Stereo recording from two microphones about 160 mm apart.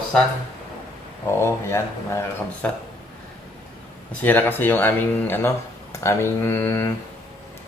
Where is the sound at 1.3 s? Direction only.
15° left (ahead or behind).